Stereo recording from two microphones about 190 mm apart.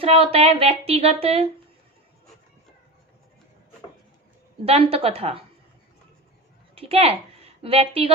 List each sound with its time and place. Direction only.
0.0 s speech: 30° right (ahead or behind)
4.6 s speech: 30° right (ahead or behind)
6.7 s a woman's voice: 30° right (ahead or behind)